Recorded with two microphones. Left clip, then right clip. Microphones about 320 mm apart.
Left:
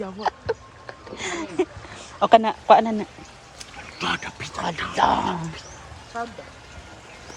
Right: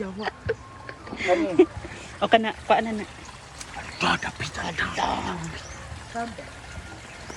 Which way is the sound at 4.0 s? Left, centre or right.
Centre.